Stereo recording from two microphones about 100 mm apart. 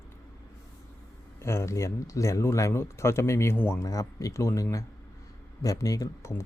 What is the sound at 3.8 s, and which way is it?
Speech, 35° left (ahead or behind).